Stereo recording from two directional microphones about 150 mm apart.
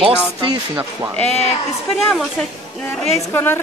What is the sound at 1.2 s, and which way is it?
Speech, 45° left (ahead or behind).